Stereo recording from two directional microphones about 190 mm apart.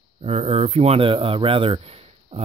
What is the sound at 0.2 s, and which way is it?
Speech, 35° right (ahead or behind).